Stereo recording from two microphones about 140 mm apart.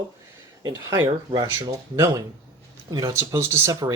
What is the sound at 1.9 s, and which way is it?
Speech, 20° right (ahead or behind).